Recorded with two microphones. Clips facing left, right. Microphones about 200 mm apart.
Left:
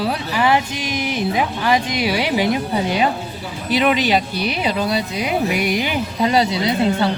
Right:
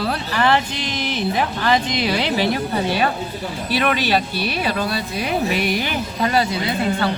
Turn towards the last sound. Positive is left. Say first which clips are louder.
# left 3 dB
turn(degrees=20)  # may be behind; listen again after turning